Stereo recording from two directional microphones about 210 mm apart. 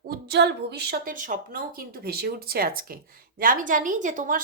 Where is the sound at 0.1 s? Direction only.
50° right (ahead or behind).